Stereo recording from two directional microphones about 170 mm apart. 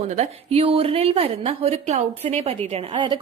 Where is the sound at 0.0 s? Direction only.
40° right (ahead or behind).